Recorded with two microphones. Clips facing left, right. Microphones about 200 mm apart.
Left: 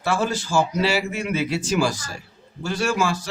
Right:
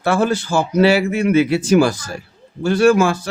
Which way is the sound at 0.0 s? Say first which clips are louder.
Right 6 dB; 60° right (ahead or behind).